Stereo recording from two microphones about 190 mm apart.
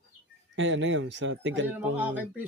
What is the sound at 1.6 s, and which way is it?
Speech, 10° right (ahead or behind).